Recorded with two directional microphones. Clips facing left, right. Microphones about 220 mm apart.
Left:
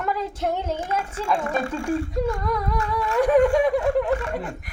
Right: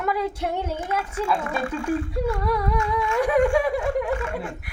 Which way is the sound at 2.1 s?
10° right (ahead or behind).